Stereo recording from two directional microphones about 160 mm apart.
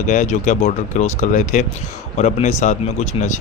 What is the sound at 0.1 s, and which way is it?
Speech, 50° left (ahead or behind).